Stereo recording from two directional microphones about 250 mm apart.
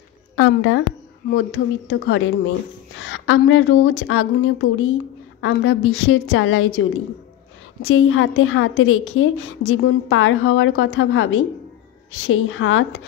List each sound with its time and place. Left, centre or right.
0.4 s a woman's voice: left